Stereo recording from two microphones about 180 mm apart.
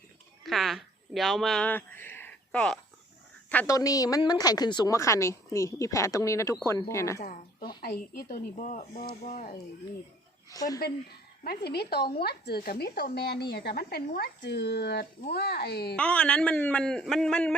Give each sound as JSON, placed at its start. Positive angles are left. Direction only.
{"t": 0.4, "sound": "a woman's voice", "side_deg": 0}
{"t": 7.2, "sound": "speech", "side_deg": 55}
{"t": 10.5, "sound": "a woman's voice", "side_deg": 20}
{"t": 11.4, "sound": "speech", "side_deg": 60}
{"t": 16.0, "sound": "a man's voice", "side_deg": 5}